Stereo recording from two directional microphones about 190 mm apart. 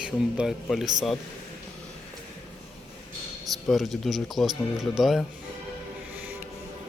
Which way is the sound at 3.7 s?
Centre (ahead or behind).